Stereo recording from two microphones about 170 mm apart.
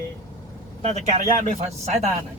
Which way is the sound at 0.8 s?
40° right (ahead or behind).